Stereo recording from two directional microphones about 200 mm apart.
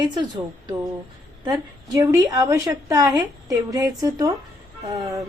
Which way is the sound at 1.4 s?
20° right (ahead or behind).